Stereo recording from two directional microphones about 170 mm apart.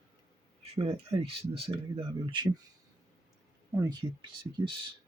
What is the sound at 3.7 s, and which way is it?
Speech, 20° right (ahead or behind).